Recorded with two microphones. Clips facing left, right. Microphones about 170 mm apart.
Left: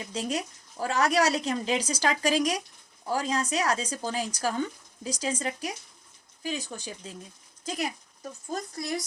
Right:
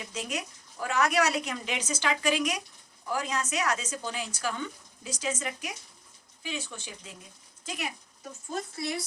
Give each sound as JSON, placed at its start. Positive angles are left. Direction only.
{"t": 0.1, "sound": "speech", "side_deg": 35}